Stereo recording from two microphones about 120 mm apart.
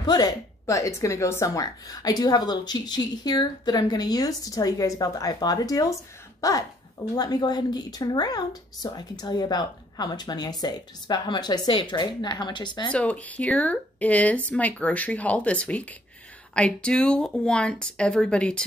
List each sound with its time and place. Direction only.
0.0 s speech: 35° left (ahead or behind)
12.9 s speech: 10° left (ahead or behind)